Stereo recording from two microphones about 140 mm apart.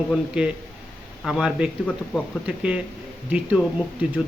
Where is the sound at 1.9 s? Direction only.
10° left (ahead or behind).